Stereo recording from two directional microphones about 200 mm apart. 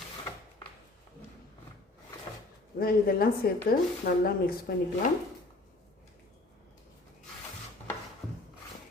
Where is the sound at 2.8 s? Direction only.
50° left (ahead or behind).